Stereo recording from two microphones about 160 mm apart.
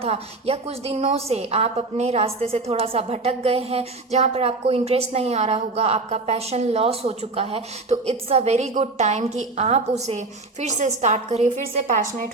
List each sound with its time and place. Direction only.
0.0 s a woman's voice: 40° right (ahead or behind)